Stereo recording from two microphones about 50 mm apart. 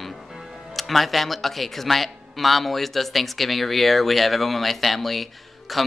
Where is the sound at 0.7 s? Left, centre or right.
Centre.